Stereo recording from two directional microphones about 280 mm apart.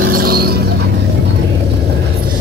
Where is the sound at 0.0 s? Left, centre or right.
Right.